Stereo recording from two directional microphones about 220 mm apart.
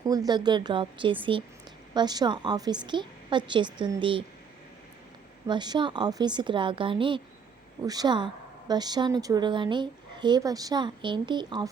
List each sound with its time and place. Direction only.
0.0 s a woman's voice: 15° right (ahead or behind)
5.5 s a woman's voice: 20° right (ahead or behind)